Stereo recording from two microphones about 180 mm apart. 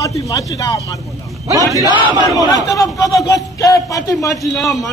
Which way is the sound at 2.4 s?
20° left (ahead or behind).